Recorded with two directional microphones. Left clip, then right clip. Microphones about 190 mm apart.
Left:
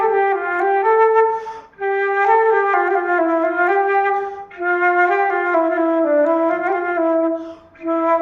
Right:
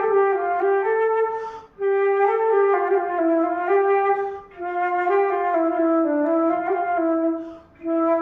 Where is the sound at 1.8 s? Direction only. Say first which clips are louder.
Left 2 dB; 15° left (ahead or behind).